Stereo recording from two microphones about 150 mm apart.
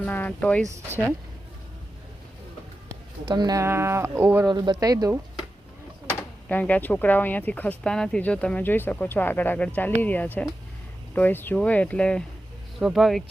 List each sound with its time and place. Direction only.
0.0 s speech: 10° left (ahead or behind)
3.2 s speech: 30° right (ahead or behind); by 4.4 s 15° right (ahead or behind)
4.4 s speech: 30° right (ahead or behind)
6.5 s speech: 10° left (ahead or behind)